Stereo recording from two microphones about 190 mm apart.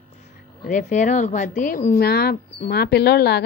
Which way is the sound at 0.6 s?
40° left (ahead or behind).